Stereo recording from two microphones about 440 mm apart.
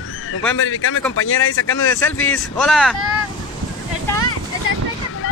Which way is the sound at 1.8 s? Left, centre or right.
Centre.